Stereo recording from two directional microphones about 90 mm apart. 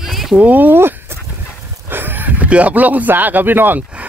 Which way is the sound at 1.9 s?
20° right (ahead or behind).